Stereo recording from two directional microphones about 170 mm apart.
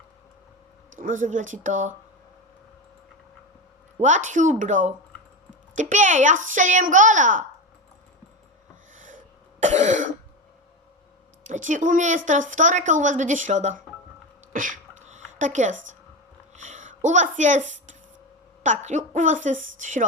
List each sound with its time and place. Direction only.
0.9 s a woman's voice: 50° right (ahead or behind)
4.0 s a woman's voice: 45° right (ahead or behind)
9.0 s throat clearing: 50° right (ahead or behind)
11.4 s a woman's voice: 45° right (ahead or behind)
14.5 s a sound: 50° right (ahead or behind)
16.6 s a woman's voice: 45° right (ahead or behind)